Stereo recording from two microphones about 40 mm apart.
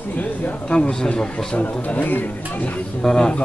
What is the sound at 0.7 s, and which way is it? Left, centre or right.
Speech, left.